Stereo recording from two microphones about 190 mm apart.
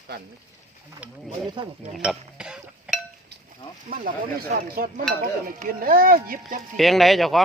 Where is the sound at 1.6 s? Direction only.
25° right (ahead or behind).